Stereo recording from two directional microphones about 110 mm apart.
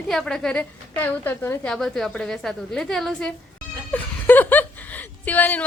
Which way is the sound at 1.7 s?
5° left (ahead or behind).